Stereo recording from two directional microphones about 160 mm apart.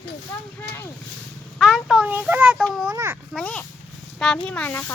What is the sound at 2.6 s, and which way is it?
Speech, centre (ahead or behind).